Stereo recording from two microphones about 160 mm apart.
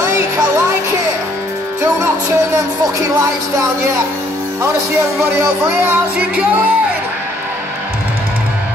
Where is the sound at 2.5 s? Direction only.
20° right (ahead or behind).